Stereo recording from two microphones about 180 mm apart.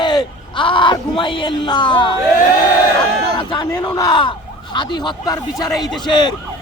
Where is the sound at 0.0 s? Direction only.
25° left (ahead or behind).